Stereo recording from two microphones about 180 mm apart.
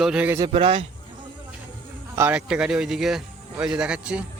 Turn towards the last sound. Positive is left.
turn(degrees=-5)  # may be behind; listen again after turning